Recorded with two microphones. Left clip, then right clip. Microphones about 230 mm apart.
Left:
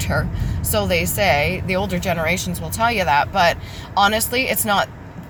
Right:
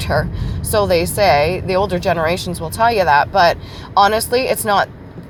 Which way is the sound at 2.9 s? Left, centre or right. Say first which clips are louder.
Right 5 dB; centre.